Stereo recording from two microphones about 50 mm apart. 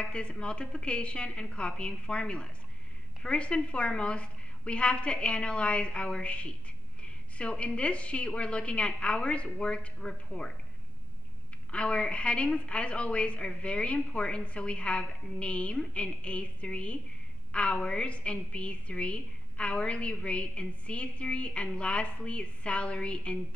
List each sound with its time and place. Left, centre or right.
0.0 s a woman's voice: left
11.7 s a woman's voice: left